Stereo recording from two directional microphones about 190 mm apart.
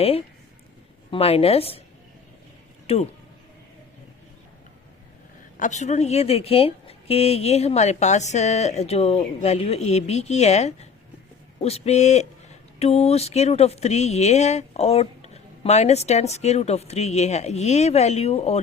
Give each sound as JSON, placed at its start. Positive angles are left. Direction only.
{"t": 1.1, "sound": "speech", "side_deg": 30}
{"t": 2.8, "sound": "speech", "side_deg": 35}
{"t": 5.5, "sound": "speech", "side_deg": 40}